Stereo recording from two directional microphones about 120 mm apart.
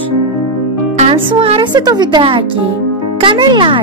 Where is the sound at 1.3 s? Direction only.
50° right (ahead or behind).